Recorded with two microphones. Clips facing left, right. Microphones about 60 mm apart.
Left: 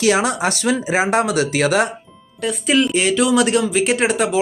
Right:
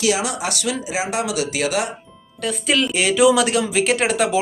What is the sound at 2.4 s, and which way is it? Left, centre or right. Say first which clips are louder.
Speech: left 3 dB; centre.